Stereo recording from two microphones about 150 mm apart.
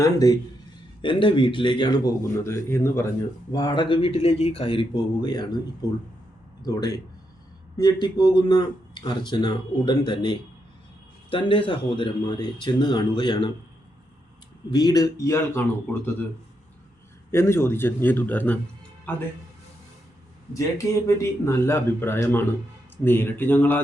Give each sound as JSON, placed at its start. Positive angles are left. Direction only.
{"t": 0.0, "sound": "speech", "side_deg": 25}
{"t": 1.0, "sound": "speech", "side_deg": 35}
{"t": 3.5, "sound": "speech", "side_deg": 30}
{"t": 6.6, "sound": "speech", "side_deg": 25}
{"t": 14.7, "sound": "speech", "side_deg": 25}
{"t": 17.3, "sound": "speech", "side_deg": 15}
{"t": 20.5, "sound": "speech", "side_deg": 20}